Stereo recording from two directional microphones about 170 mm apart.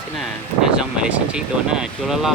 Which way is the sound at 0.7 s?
5° right (ahead or behind).